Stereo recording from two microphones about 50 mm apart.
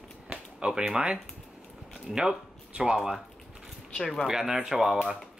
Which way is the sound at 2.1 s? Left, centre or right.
Centre.